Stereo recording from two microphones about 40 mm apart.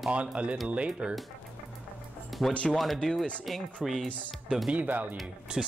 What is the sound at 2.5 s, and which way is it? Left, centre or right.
Speech, left.